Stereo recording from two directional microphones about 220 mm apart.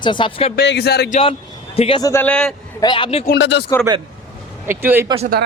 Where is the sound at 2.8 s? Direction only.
20° left (ahead or behind).